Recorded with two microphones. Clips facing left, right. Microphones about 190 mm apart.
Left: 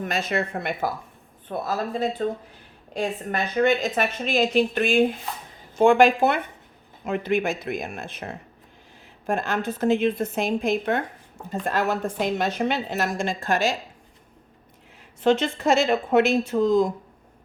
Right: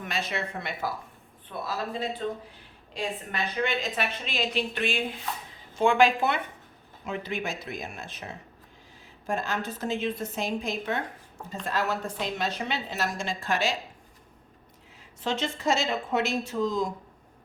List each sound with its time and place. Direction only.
0.0 s a woman's voice: 45° left (ahead or behind)
15.2 s a woman's voice: 55° left (ahead or behind)